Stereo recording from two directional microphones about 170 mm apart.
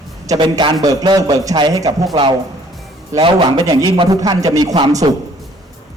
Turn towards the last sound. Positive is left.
turn(degrees=-25)  # may be behind; listen again after turning